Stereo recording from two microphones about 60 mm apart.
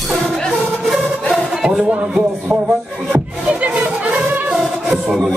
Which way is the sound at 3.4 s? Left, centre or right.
Centre.